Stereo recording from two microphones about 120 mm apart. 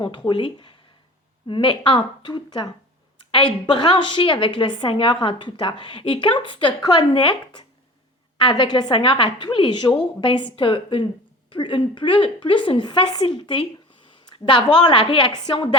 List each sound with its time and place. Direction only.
0.3 s a woman's voice: 45° left (ahead or behind)